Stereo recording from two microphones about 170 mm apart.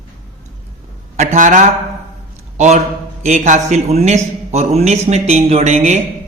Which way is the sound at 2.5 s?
45° right (ahead or behind).